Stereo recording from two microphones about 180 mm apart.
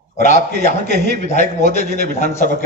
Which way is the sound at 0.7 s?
60° right (ahead or behind).